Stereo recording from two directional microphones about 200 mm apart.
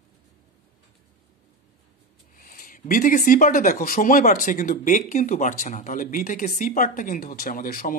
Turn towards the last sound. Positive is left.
turn(degrees=45)  # may be behind; listen again after turning